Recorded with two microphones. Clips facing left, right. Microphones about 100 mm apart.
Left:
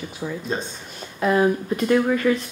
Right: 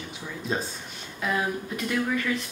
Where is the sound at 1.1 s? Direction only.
45° left (ahead or behind).